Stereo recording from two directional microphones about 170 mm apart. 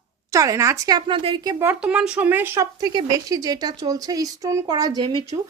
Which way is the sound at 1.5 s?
10° right (ahead or behind).